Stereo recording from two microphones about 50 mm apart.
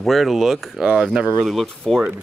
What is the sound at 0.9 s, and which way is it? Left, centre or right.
Speech, centre.